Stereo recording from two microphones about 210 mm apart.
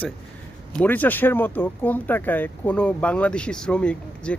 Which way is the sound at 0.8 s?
10° left (ahead or behind).